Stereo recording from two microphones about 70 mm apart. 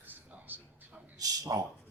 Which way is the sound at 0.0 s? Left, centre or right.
Right.